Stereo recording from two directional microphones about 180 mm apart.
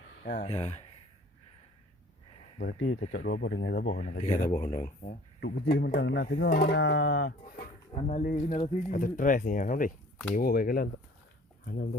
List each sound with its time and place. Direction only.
0.4 s speech: 35° left (ahead or behind)
2.7 s speech: 90° left
3.1 s speech: 60° left (ahead or behind)
3.4 s music: 80° left
3.8 s speech: 45° left (ahead or behind)
5.4 s speech: 65° left (ahead or behind)
6.5 s music: 60° left (ahead or behind); by 7.3 s 75° left (ahead or behind)
7.9 s speech: 35° left (ahead or behind); by 10.8 s 55° left (ahead or behind)